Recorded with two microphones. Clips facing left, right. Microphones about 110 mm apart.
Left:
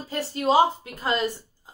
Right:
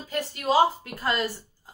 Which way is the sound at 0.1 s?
25° left (ahead or behind).